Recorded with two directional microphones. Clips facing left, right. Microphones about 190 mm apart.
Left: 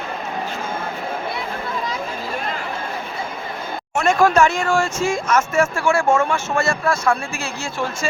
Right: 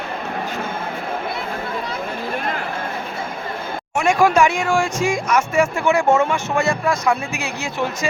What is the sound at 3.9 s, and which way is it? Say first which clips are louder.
Speech: even; 15° right (ahead or behind).